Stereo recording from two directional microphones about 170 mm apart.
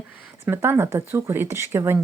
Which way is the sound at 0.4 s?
15° right (ahead or behind).